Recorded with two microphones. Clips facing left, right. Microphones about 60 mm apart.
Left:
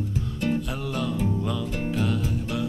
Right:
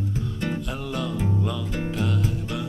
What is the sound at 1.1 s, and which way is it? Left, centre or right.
Music, centre.